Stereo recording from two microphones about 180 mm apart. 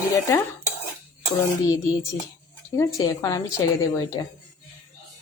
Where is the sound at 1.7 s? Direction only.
20° left (ahead or behind).